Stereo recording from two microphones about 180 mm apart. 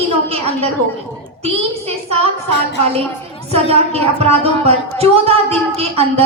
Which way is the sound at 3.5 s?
35° right (ahead or behind).